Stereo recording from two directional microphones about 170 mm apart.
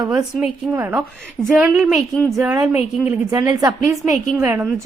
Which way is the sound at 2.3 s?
15° right (ahead or behind).